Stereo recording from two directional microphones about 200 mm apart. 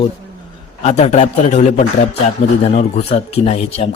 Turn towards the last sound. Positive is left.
turn(degrees=30)  # may be behind; listen again after turning